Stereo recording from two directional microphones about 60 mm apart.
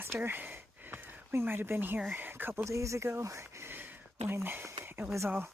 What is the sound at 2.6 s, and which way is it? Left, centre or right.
Speech, right.